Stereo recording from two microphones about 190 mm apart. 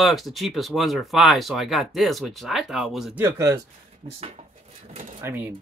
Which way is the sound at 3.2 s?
15° right (ahead or behind).